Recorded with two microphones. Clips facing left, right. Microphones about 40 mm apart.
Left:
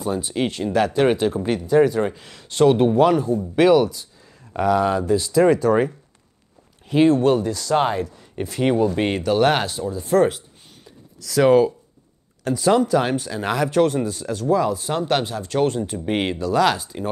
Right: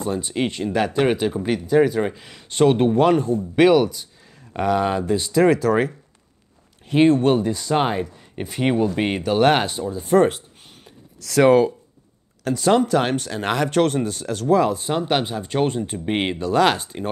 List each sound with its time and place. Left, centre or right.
0.0 s speech: centre
5.4 s speech: centre
6.9 s speech: centre
12.5 s speech: centre
13.3 s speech: right
13.6 s speech: centre
14.5 s speech: right
14.8 s speech: centre